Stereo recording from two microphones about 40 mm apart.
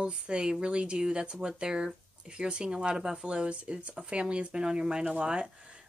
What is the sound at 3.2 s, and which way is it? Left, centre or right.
Speech, right.